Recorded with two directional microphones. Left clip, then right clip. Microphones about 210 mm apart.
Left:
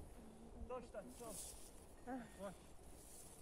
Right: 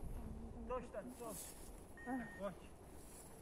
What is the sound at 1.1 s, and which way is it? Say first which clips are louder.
Speech: right 4 dB; 35° right (ahead or behind).